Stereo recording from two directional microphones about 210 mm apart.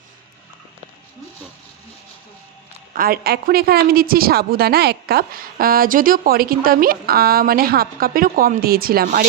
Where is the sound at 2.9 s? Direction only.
45° right (ahead or behind).